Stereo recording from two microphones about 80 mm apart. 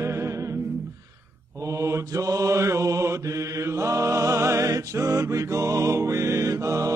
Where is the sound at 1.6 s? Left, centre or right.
Right.